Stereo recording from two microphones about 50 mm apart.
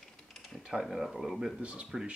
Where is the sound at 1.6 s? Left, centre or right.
Right.